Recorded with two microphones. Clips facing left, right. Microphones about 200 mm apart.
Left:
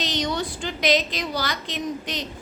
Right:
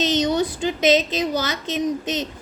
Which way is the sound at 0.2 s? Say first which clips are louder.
Right 6 dB; 20° right (ahead or behind).